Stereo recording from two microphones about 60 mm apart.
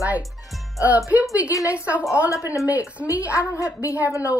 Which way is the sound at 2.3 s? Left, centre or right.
Left.